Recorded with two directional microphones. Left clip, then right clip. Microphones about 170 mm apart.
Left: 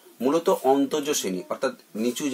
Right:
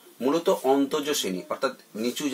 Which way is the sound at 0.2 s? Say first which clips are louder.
Left 2 dB; centre (ahead or behind).